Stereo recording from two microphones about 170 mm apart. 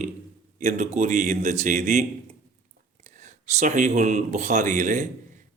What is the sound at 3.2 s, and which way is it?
A man's voice, 50° right (ahead or behind).